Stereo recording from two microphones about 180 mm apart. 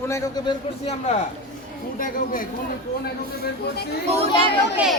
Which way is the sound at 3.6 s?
65° left (ahead or behind).